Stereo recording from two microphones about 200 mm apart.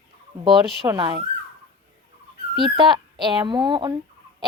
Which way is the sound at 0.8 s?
20° right (ahead or behind).